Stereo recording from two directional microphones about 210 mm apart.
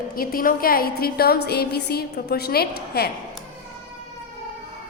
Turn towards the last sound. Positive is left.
turn(degrees=45)  # may be behind; listen again after turning